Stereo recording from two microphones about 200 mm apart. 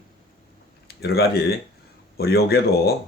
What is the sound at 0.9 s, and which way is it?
Speech, 50° left (ahead or behind).